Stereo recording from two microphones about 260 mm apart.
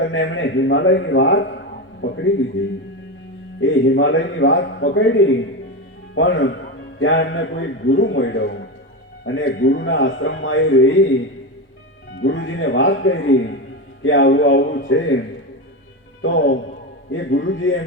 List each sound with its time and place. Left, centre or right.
0.0 s a man's voice: left
3.6 s a man's voice: left
12.2 s a man's voice: left
16.2 s a man's voice: left